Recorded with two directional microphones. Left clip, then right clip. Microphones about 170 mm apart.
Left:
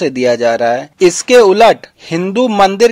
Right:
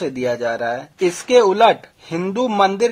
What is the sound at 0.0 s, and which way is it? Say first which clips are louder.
Speech: left 9 dB; 35° left (ahead or behind).